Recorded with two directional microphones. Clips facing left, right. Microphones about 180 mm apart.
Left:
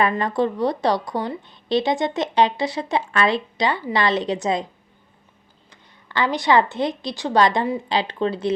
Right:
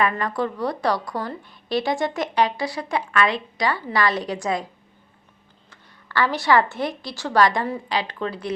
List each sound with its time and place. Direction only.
0.1 s a woman's voice: 25° left (ahead or behind)
5.7 s a woman's voice: 20° left (ahead or behind)